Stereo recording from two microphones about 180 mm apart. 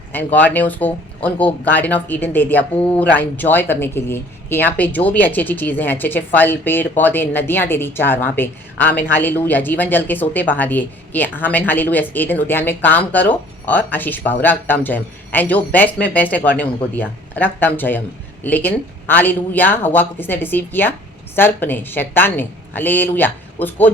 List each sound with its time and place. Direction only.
0.1 s speech: 10° left (ahead or behind)